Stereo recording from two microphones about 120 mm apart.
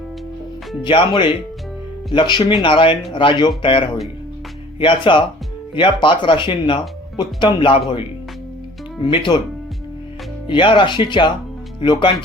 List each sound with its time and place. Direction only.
0.9 s speech: 40° left (ahead or behind)
9.0 s speech: 45° left (ahead or behind)
10.4 s speech: 45° left (ahead or behind)